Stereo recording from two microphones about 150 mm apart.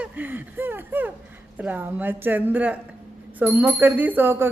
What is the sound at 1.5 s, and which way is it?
Speech, 10° right (ahead or behind).